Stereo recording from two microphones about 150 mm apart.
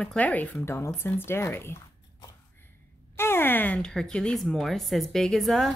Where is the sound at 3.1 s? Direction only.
15° left (ahead or behind).